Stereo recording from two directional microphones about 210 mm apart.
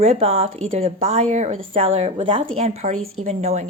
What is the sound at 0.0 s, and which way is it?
A woman's voice, 30° right (ahead or behind).